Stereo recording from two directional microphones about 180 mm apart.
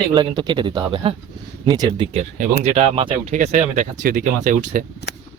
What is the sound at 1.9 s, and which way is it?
Speech, 30° right (ahead or behind).